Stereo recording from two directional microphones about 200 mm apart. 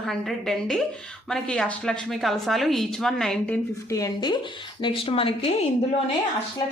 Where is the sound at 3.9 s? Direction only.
20° left (ahead or behind).